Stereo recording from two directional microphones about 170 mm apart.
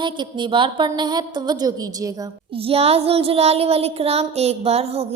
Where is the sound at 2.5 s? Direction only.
35° right (ahead or behind).